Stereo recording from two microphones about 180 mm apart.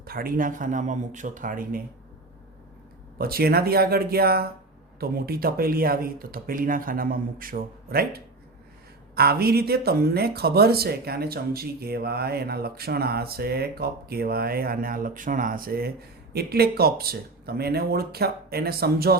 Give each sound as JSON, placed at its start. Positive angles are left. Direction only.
{"t": 0.0, "sound": "speech", "side_deg": -55}
{"t": 3.2, "sound": "speech", "side_deg": -55}